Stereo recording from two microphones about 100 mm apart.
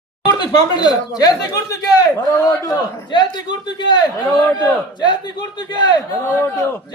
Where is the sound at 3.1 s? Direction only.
45° left (ahead or behind).